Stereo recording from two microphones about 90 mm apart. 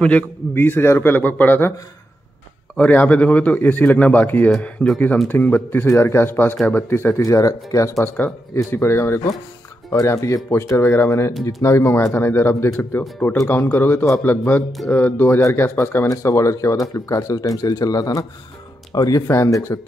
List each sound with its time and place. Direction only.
0.0 s a man's voice: 20° left (ahead or behind)
2.8 s speech: 15° left (ahead or behind)
4.5 s speech: 5° left (ahead or behind)
5.3 s a man's voice: 20° left (ahead or behind)
7.2 s speech: 40° left (ahead or behind)
8.2 s a man's voice: 20° left (ahead or behind); by 19.2 s 45° left (ahead or behind)
19.2 s speech: 30° left (ahead or behind)